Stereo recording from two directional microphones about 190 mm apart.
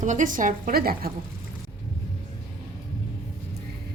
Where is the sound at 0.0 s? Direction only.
40° right (ahead or behind).